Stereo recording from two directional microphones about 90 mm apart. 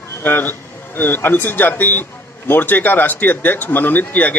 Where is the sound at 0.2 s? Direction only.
20° left (ahead or behind).